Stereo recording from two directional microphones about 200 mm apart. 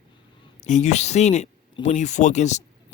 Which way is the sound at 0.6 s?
35° left (ahead or behind).